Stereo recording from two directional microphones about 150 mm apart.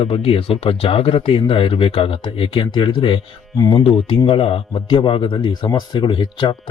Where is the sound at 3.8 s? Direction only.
35° left (ahead or behind).